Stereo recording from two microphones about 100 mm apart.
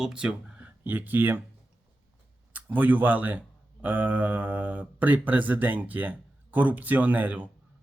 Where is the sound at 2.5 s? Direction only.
15° right (ahead or behind).